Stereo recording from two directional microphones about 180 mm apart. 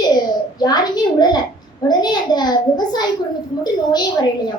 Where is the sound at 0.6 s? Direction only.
25° left (ahead or behind).